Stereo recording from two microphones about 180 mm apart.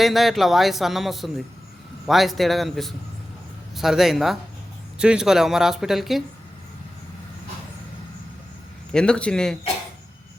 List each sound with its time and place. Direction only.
0.0 s speech: centre (ahead or behind)
8.9 s speech: 5° left (ahead or behind)